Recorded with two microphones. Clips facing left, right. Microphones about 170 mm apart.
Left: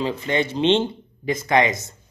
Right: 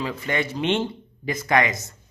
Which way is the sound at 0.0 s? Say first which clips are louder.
Left 4 dB; 25° left (ahead or behind).